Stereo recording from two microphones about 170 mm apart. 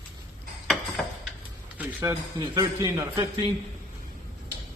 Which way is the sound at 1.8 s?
20° right (ahead or behind).